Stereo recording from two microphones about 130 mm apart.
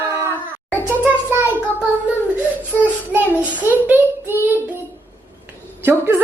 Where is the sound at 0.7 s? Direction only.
15° left (ahead or behind).